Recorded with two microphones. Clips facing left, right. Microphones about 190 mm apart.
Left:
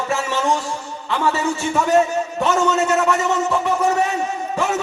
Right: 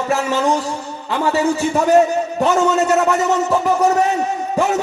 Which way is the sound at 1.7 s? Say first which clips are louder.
Right 3 dB; 35° right (ahead or behind).